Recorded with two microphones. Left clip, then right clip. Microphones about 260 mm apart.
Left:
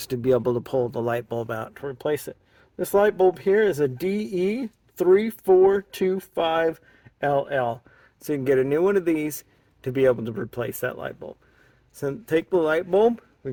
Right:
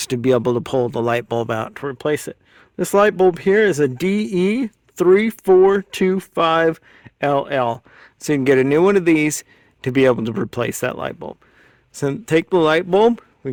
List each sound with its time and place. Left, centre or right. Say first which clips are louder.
0.0 s speech: right 5 dB; right